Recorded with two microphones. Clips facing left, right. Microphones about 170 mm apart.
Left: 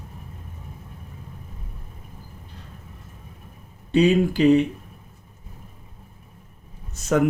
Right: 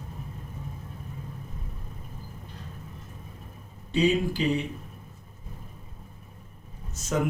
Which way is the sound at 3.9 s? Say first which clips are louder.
Left 6 dB; 65° left (ahead or behind).